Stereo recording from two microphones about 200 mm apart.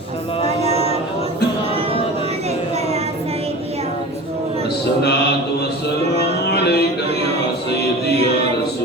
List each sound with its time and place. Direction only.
0.4 s music: 30° right (ahead or behind)
6.1 s music: 55° left (ahead or behind)